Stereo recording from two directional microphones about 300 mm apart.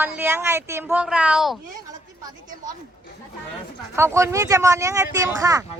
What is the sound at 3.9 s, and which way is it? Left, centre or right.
Speech, centre.